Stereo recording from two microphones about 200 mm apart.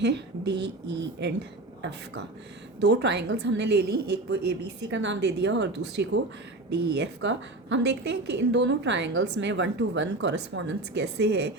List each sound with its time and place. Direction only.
0.0 s a woman's voice: 60° right (ahead or behind)
2.8 s a woman's voice: 60° right (ahead or behind)